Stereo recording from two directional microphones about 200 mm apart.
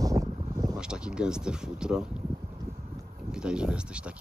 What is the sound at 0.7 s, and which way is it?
Speech, 5° right (ahead or behind).